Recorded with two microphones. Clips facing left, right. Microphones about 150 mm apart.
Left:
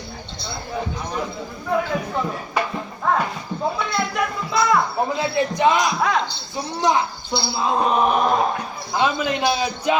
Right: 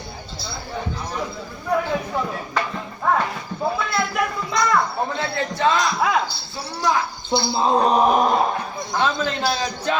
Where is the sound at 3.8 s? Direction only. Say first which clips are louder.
Even; centre (ahead or behind).